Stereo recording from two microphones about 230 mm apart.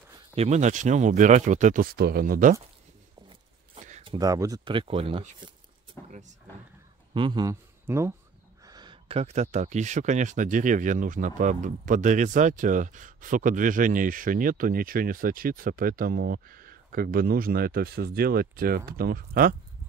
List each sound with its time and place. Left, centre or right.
0.4 s speech: right
4.0 s speech: centre
6.0 s vehicle: right
7.2 s speech: centre; by 19.5 s right